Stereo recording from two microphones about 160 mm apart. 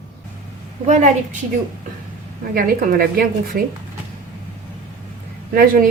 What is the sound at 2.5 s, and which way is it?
A woman's voice, 65° right (ahead or behind).